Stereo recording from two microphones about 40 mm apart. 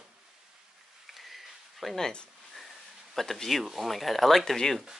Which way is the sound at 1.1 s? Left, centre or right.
Centre.